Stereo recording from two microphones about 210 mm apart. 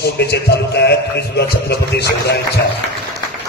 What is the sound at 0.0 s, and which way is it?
A man's voice, 50° left (ahead or behind).